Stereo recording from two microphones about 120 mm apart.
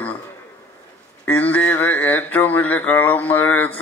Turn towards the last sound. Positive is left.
turn(degrees=15)  # may be behind; listen again after turning